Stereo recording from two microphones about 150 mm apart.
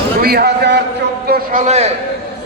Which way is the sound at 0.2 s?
90° right.